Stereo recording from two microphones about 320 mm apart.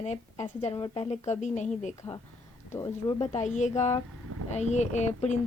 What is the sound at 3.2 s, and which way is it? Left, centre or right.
Speech, left.